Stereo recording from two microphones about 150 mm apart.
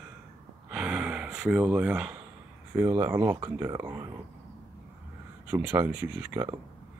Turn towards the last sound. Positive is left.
turn(degrees=-15)  # may be behind; listen again after turning